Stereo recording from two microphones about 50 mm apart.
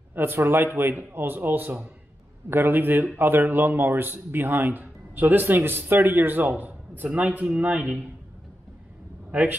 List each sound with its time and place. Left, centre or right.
0.1 s a man's voice: right
9.3 s speech: right